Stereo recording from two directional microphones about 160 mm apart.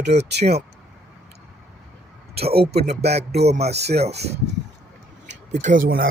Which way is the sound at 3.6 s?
90° right.